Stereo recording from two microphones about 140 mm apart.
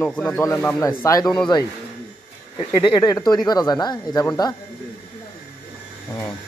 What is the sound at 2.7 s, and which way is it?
Speech, 35° left (ahead or behind).